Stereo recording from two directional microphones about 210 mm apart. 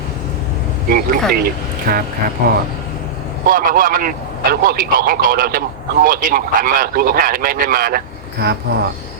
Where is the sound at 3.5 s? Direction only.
40° right (ahead or behind).